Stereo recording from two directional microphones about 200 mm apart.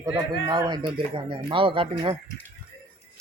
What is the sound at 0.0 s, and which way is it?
Speech, 20° right (ahead or behind).